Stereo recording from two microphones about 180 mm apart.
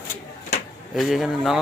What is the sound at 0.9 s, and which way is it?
Speech, centre (ahead or behind).